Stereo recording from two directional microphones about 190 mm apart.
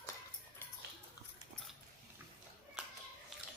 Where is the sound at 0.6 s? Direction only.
10° left (ahead or behind).